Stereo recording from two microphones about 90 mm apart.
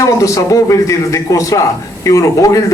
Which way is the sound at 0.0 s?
40° left (ahead or behind).